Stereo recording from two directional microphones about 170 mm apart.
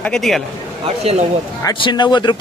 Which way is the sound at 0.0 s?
5° left (ahead or behind).